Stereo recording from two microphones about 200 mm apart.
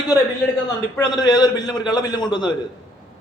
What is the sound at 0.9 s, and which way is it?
A man's voice, 20° left (ahead or behind).